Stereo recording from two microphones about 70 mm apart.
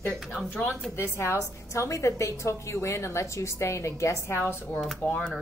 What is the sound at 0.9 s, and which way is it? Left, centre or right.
A woman's voice, left.